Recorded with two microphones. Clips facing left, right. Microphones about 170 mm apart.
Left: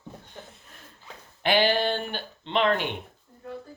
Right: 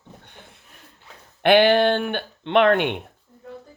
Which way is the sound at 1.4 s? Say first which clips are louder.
Right 8 dB; 60° right (ahead or behind).